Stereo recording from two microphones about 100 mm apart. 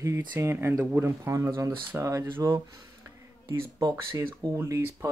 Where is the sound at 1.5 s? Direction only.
45° right (ahead or behind).